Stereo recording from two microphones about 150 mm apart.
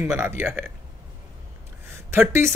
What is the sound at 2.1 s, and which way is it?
Speech, 15° right (ahead or behind).